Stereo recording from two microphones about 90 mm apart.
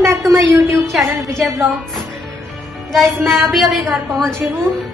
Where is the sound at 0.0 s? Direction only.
35° right (ahead or behind).